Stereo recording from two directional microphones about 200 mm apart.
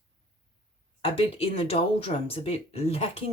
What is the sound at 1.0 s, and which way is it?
Speech, 30° left (ahead or behind).